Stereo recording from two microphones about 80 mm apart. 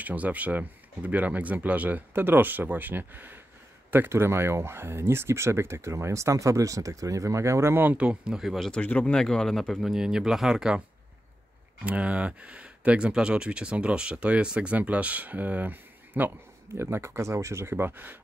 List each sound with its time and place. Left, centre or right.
0.0 s speech: centre; by 7.8 s right
7.8 s speech: centre
8.8 s speech: centre
9.9 s speech: centre
11.8 s speech: centre